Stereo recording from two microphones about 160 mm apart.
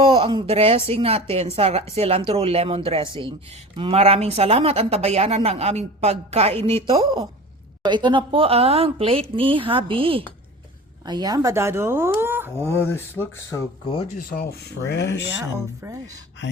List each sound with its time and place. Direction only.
0.0 s speech: 35° right (ahead or behind); by 12.5 s 15° right (ahead or behind)
12.5 s speech: 15° left (ahead or behind)
14.3 s speech: 70° left (ahead or behind); by 15.2 s 90° left
15.8 s speech: 15° right (ahead or behind)